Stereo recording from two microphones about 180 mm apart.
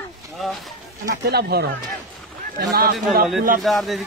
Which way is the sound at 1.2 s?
60° right (ahead or behind).